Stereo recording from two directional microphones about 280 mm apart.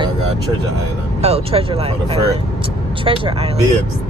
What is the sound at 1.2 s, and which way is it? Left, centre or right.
Speech, right.